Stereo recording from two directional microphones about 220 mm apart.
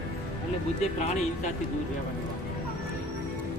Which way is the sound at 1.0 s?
30° left (ahead or behind).